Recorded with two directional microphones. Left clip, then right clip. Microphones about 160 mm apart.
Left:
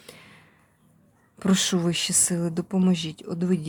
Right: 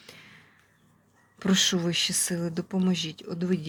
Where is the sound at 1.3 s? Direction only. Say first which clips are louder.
Even; 25° left (ahead or behind).